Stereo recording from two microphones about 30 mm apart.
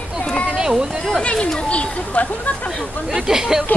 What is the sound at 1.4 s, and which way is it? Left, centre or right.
Speech, left.